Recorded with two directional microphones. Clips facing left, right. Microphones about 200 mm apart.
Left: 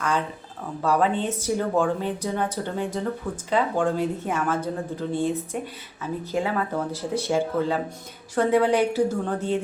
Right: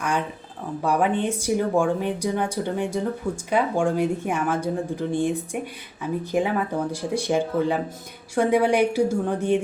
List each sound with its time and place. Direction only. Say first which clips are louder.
0.8 s speech: even; 15° right (ahead or behind)